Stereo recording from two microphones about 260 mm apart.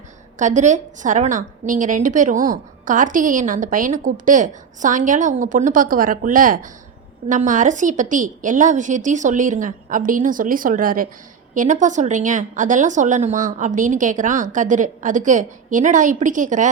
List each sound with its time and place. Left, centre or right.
0.3 s a woman's voice: right